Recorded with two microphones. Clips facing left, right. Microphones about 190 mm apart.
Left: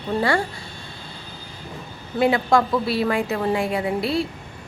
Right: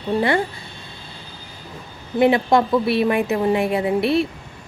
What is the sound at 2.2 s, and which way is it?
A woman's voice, 20° right (ahead or behind).